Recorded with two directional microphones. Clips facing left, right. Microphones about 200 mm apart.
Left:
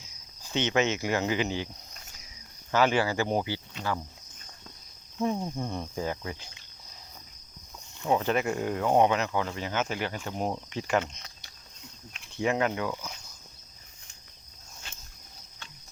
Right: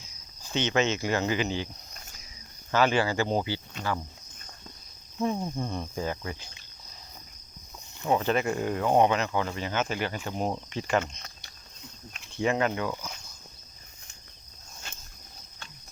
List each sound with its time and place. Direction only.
0.5 s speech: 20° left (ahead or behind)
2.7 s speech: 15° left (ahead or behind)
5.2 s speech: 10° left (ahead or behind)
8.1 s speech: 10° left (ahead or behind)
10.2 s speech: 5° right (ahead or behind)
10.7 s speech: 10° left (ahead or behind)
11.0 s speech: 50° right (ahead or behind)
12.4 s speech: 10° left (ahead or behind)